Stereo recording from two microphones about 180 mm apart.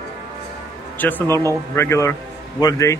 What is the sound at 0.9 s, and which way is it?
Speech, 10° left (ahead or behind).